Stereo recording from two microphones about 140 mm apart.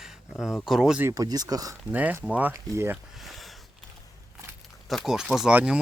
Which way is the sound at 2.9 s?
Centre (ahead or behind).